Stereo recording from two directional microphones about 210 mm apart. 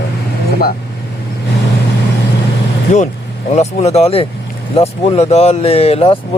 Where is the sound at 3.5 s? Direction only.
30° left (ahead or behind).